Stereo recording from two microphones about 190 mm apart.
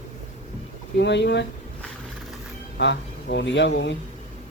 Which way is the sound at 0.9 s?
65° left (ahead or behind).